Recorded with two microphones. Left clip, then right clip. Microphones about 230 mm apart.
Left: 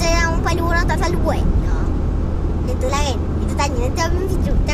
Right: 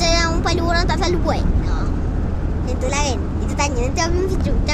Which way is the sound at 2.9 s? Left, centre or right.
Centre.